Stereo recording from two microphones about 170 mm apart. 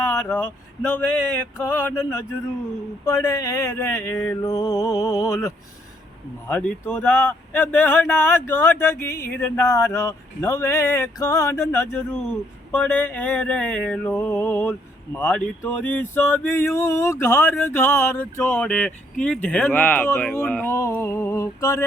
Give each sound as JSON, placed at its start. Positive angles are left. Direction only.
{"t": 0.0, "sound": "music", "side_deg": 15}
{"t": 3.1, "sound": "a sound", "side_deg": 20}
{"t": 6.5, "sound": "music", "side_deg": 10}